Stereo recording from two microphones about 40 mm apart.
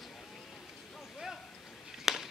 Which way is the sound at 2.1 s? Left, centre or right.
Centre.